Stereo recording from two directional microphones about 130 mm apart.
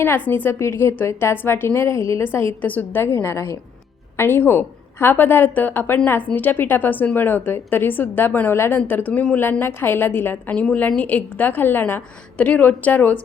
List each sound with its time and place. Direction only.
0.0 s a woman's voice: 15° left (ahead or behind)